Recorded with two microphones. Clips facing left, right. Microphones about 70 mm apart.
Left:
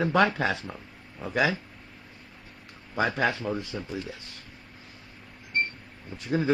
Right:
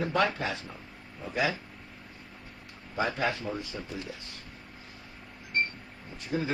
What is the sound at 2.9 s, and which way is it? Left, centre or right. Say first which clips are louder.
Speech: left 4 dB; left.